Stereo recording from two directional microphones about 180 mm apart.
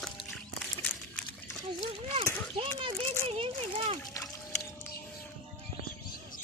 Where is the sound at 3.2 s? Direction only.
30° right (ahead or behind).